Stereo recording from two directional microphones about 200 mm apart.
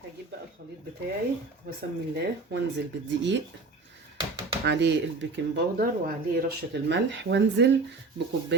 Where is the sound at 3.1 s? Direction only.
65° right (ahead or behind).